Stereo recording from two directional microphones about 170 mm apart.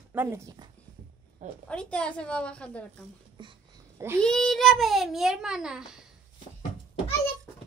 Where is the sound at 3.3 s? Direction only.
30° right (ahead or behind).